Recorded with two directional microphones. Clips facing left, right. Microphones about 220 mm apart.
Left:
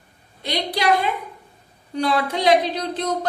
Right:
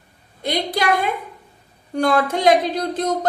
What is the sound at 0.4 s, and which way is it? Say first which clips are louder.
Speech: right 1 dB; 50° right (ahead or behind).